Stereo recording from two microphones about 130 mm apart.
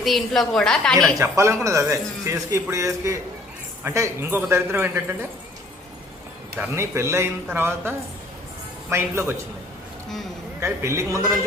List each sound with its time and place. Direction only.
0.0 s a woman's voice: centre (ahead or behind)
1.2 s a man's voice: 20° right (ahead or behind)
6.6 s a man's voice: 20° right (ahead or behind)
10.6 s a man's voice: 20° right (ahead or behind)